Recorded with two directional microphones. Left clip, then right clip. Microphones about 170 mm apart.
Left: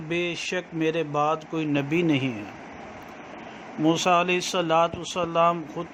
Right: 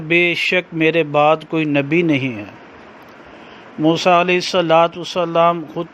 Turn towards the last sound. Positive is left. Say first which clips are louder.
# right 7 dB
turn(degrees=-35)  # may be behind; listen again after turning